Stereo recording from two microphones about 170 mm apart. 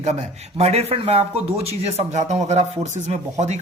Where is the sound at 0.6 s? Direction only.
40° right (ahead or behind).